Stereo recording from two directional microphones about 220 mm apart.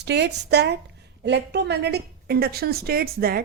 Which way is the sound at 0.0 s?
50° right (ahead or behind).